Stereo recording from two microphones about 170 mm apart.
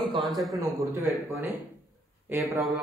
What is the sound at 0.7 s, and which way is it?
Speech, 20° right (ahead or behind).